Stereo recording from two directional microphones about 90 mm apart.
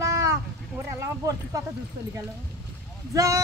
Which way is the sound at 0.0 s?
35° right (ahead or behind).